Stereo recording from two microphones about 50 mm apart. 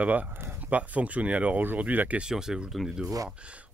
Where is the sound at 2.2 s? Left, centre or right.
Centre.